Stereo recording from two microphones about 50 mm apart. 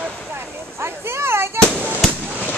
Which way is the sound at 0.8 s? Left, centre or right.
Right.